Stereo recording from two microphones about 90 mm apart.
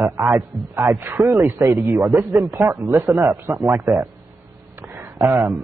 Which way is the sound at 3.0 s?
40° right (ahead or behind).